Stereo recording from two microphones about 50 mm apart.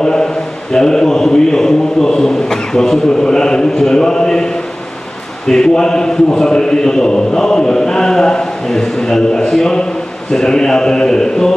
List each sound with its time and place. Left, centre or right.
0.0 s a man's voice: centre
0.7 s chant: centre
5.5 s chant: centre